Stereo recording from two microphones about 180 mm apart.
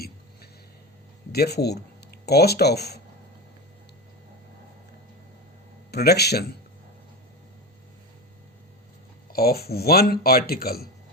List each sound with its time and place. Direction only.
1.3 s a man's voice: 65° left (ahead or behind)
5.9 s a man's voice: 65° left (ahead or behind)
9.3 s a man's voice: 55° left (ahead or behind)